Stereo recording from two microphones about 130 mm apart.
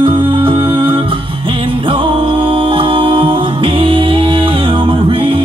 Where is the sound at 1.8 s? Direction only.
40° right (ahead or behind).